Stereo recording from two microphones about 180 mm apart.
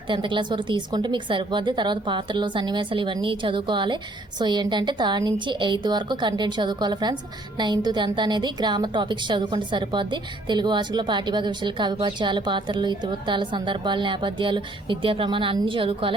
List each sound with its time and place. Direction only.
0.1 s a woman's voice: 25° right (ahead or behind)